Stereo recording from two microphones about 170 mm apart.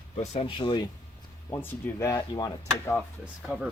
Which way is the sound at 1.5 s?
15° left (ahead or behind).